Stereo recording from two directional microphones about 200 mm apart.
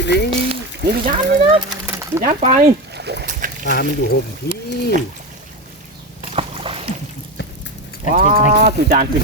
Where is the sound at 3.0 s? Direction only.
55° right (ahead or behind).